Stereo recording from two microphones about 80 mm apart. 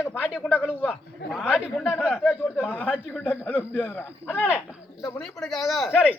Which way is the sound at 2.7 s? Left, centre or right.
Left.